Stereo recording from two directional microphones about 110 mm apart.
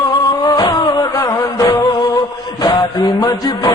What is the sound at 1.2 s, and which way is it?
Music, 35° left (ahead or behind).